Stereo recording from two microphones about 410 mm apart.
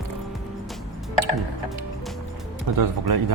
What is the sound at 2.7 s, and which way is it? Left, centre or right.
Speech, right.